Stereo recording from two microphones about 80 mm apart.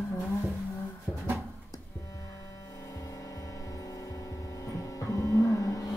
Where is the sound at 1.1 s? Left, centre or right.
Centre.